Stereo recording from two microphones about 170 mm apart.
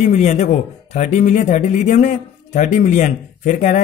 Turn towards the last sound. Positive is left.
turn(degrees=50)  # may be behind; listen again after turning